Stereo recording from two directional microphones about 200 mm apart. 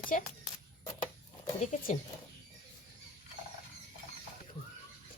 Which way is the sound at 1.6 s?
45° left (ahead or behind).